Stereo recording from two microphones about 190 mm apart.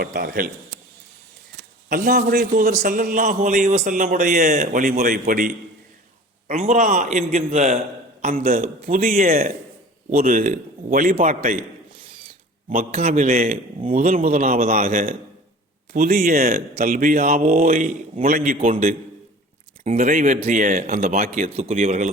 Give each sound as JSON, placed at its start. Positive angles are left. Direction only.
{"t": 0.0, "sound": "a man's voice", "side_deg": -50}
{"t": 1.9, "sound": "a man's voice", "side_deg": -45}
{"t": 6.5, "sound": "a man's voice", "side_deg": -35}
{"t": 12.7, "sound": "a man's voice", "side_deg": -40}
{"t": 14.6, "sound": "a man's voice", "side_deg": -35}
{"t": 15.9, "sound": "a man's voice", "side_deg": -50}
{"t": 20.0, "sound": "a man's voice", "side_deg": -45}
{"t": 21.2, "sound": "a man's voice", "side_deg": -35}